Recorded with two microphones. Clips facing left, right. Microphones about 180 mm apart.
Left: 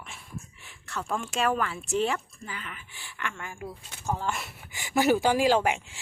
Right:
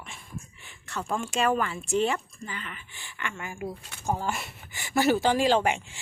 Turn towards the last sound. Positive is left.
turn(degrees=5)  # may be behind; listen again after turning